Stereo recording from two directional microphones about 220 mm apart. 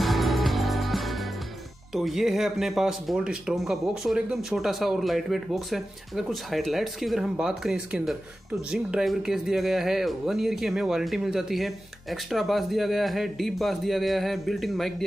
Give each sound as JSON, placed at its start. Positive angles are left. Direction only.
{"t": 0.0, "sound": "music", "side_deg": 0}
{"t": 2.0, "sound": "speech", "side_deg": 0}